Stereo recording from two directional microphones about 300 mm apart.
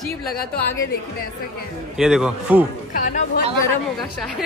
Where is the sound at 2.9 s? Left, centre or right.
Left.